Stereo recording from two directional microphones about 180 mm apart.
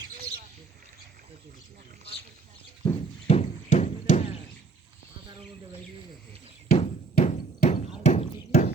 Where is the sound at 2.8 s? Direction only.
35° left (ahead or behind).